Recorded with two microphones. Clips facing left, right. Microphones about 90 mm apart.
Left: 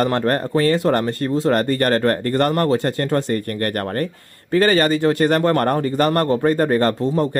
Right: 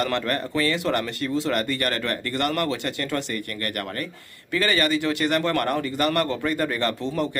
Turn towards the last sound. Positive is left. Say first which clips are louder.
# left 7 dB
turn(degrees=40)  # may be behind; listen again after turning